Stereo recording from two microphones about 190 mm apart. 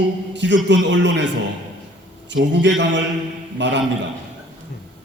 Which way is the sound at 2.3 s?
70° right (ahead or behind).